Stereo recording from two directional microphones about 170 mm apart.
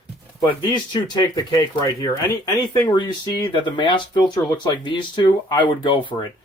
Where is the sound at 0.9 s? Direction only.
25° left (ahead or behind).